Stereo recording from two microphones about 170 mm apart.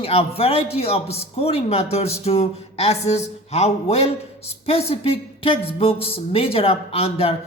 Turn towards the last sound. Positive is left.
turn(degrees=35)  # may be behind; listen again after turning